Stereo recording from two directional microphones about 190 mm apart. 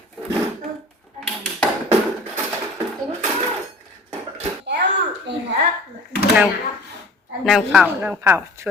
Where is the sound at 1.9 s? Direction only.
15° right (ahead or behind).